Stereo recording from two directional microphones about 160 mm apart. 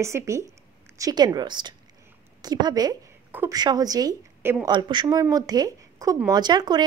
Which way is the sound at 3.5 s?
25° right (ahead or behind).